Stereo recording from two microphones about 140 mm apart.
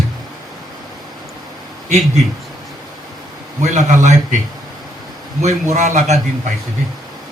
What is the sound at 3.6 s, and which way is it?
Speech, 55° right (ahead or behind).